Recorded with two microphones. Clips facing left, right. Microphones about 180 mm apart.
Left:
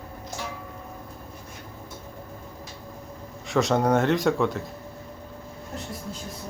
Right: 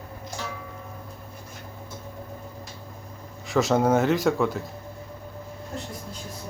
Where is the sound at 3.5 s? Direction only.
Centre (ahead or behind).